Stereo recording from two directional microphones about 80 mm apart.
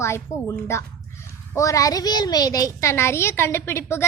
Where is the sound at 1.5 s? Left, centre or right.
Left.